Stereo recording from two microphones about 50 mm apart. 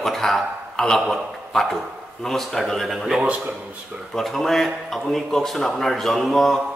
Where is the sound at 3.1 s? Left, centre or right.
Right.